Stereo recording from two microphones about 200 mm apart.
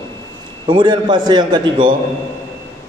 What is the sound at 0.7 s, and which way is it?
A man's voice, 25° right (ahead or behind).